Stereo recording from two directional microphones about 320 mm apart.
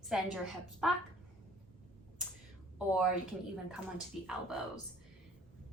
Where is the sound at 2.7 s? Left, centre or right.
Centre.